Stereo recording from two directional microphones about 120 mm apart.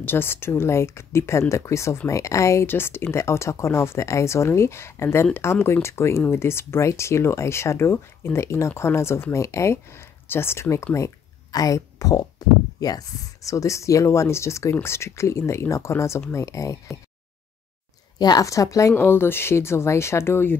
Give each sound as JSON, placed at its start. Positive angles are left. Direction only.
{"t": 0.0, "sound": "speech", "side_deg": 20}
{"t": 18.2, "sound": "speech", "side_deg": 30}